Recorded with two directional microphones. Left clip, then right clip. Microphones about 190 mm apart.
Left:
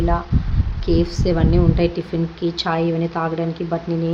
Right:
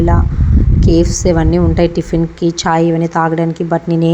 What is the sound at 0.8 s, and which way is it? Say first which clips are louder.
A woman's voice: right 7 dB; 35° right (ahead or behind).